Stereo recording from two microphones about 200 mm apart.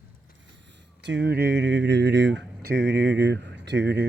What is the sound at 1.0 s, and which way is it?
Speech, 60° right (ahead or behind).